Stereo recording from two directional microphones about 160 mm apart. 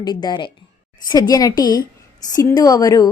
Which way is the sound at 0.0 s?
25° left (ahead or behind).